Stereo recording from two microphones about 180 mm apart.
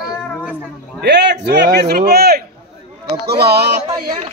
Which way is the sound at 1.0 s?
70° right (ahead or behind).